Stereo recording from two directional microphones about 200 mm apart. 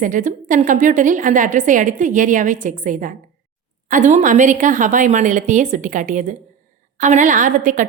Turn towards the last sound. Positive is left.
turn(degrees=-40)  # may be behind; listen again after turning